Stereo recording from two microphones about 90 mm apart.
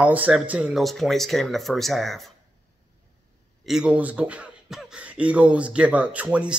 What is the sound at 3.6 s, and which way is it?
Speech, 5° right (ahead or behind).